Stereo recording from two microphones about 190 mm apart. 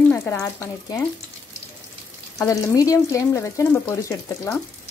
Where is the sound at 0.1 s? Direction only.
10° left (ahead or behind).